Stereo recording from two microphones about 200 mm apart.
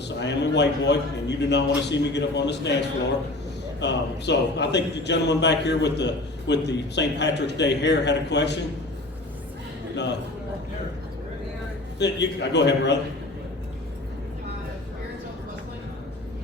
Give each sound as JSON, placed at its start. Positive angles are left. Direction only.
{"t": 0.2, "sound": "a man's voice", "side_deg": 60}
{"t": 3.8, "sound": "a man's voice", "side_deg": 60}
{"t": 11.9, "sound": "a man's voice", "side_deg": 60}